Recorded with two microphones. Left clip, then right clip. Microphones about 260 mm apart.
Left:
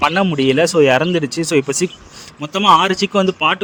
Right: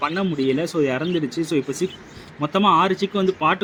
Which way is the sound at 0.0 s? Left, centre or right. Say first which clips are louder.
Left 8 dB; left.